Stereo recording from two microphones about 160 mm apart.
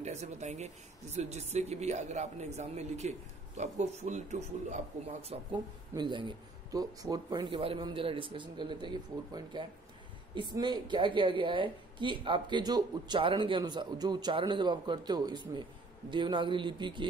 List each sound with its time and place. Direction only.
0.0 s speech: 45° right (ahead or behind)
5.9 s a woman's voice: 30° right (ahead or behind)